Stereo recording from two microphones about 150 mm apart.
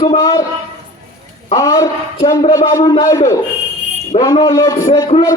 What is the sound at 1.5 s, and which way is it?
A man's voice, 20° left (ahead or behind).